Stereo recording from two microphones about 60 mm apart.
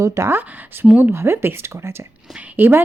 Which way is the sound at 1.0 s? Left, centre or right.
Right.